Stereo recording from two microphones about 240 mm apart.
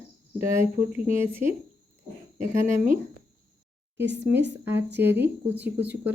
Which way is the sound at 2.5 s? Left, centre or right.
Right.